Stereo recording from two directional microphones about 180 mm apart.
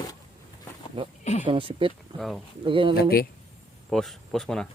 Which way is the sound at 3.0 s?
60° left (ahead or behind).